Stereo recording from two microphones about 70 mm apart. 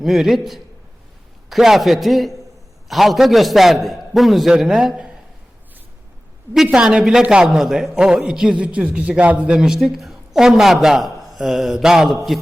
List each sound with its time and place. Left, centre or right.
0.0 s speech: centre
6.5 s a man's voice: centre
9.6 s speech: centre